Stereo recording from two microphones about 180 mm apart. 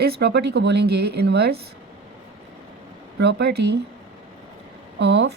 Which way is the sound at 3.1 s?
70° right (ahead or behind).